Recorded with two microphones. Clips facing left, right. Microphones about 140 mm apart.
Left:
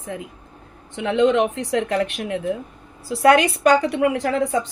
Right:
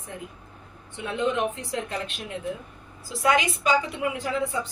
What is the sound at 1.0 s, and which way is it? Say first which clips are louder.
A woman's voice: left 9 dB; 85° left.